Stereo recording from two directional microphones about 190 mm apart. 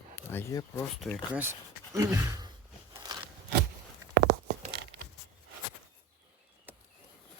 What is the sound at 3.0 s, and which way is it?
Scissors, 20° right (ahead or behind).